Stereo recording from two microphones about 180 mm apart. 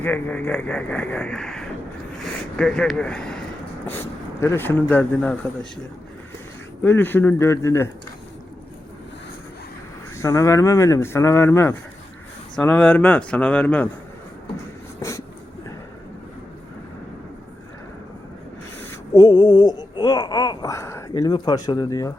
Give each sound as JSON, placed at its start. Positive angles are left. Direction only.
{"t": 0.0, "sound": "speech", "side_deg": 10}
{"t": 6.8, "sound": "speech", "side_deg": 10}
{"t": 10.2, "sound": "speech", "side_deg": 15}
{"t": 18.9, "sound": "a sound", "side_deg": 20}